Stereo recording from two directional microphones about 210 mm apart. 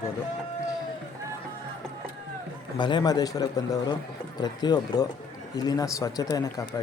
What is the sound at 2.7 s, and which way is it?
A man's voice, 20° left (ahead or behind).